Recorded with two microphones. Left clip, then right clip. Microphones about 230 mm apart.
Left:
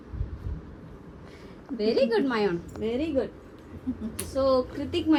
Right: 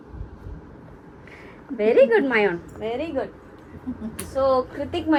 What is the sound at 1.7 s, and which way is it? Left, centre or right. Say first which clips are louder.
Speech: right 6 dB; right.